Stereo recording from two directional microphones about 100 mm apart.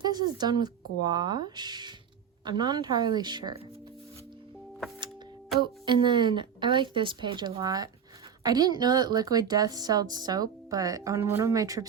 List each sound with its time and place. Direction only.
0.0 s a woman's voice: 45° right (ahead or behind)
5.5 s a woman's voice: 50° right (ahead or behind)
7.6 s a woman's voice: 40° right (ahead or behind)